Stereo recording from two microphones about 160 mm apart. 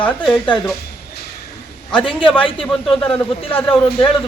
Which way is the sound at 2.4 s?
35° left (ahead or behind).